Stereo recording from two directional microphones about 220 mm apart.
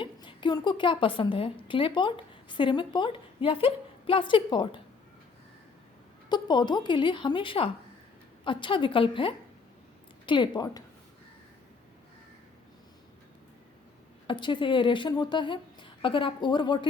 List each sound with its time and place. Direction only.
0.0 s a woman's voice: 20° left (ahead or behind)
6.2 s speech: 20° left (ahead or behind)
14.3 s speech: 20° left (ahead or behind)